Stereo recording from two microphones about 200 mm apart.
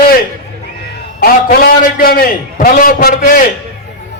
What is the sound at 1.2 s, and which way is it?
A man's voice, 45° left (ahead or behind).